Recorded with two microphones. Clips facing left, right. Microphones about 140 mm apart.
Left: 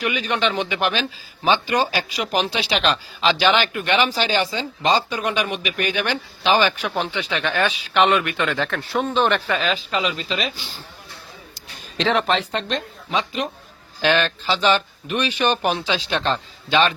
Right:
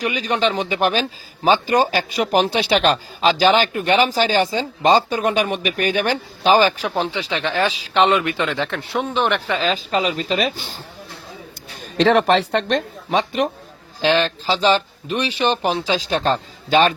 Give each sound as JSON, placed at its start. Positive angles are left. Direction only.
{"t": 0.0, "sound": "speech", "side_deg": -35}
{"t": 9.0, "sound": "speech", "side_deg": -10}
{"t": 9.5, "sound": "a woman's voice", "side_deg": -30}
{"t": 11.9, "sound": "a woman's voice", "side_deg": -50}
{"t": 12.5, "sound": "a woman's voice", "side_deg": -55}
{"t": 14.0, "sound": "speech", "side_deg": -25}
{"t": 15.8, "sound": "speech", "side_deg": -40}